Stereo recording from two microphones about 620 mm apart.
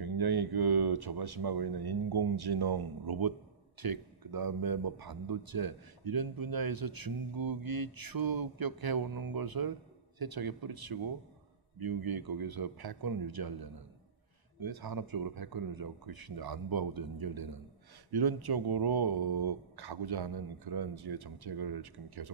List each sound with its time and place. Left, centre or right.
0.0 s a man's voice: right